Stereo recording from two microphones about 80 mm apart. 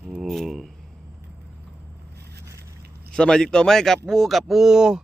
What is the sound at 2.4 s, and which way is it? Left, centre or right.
Biting, right.